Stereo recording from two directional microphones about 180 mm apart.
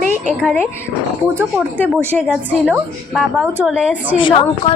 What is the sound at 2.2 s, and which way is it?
A woman's voice, 10° right (ahead or behind).